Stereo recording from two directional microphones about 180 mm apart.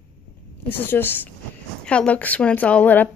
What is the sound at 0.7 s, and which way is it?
A woman's voice, 10° left (ahead or behind).